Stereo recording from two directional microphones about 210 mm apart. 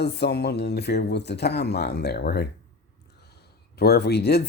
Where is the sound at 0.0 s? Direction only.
50° left (ahead or behind).